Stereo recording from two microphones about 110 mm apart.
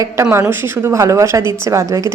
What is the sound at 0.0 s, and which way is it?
A woman's voice, 25° right (ahead or behind).